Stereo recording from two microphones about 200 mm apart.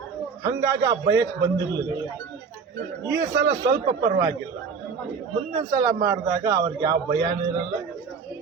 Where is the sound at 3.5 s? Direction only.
20° right (ahead or behind).